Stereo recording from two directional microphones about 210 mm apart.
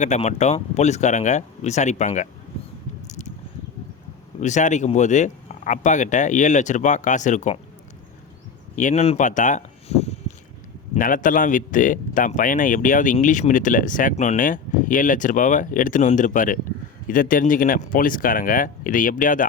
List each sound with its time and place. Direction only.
0.0 s speech: 35° left (ahead or behind)
3.1 s a sound: 35° left (ahead or behind)
4.4 s speech: 35° left (ahead or behind)
8.7 s speech: 35° left (ahead or behind)